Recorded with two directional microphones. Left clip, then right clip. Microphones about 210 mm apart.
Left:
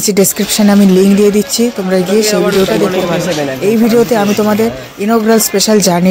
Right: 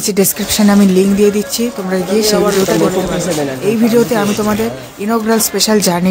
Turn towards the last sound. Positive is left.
turn(degrees=20)  # may be behind; listen again after turning